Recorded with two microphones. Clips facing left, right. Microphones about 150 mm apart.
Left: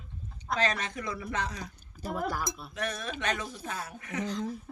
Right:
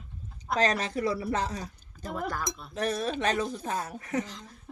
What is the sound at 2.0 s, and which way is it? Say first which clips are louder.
Speech: left 1 dB; 10° left (ahead or behind).